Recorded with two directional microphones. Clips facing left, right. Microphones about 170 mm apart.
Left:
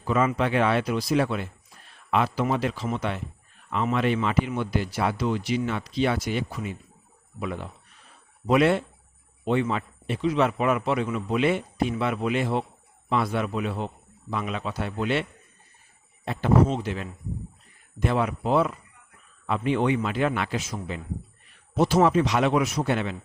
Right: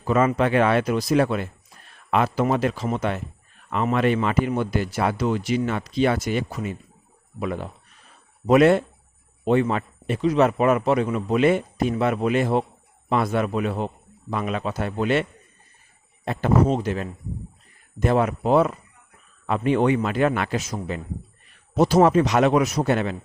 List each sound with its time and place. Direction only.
0.0 s a man's voice: 45° right (ahead or behind)